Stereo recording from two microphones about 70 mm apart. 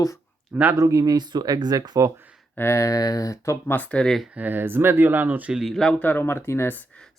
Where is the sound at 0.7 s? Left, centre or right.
Right.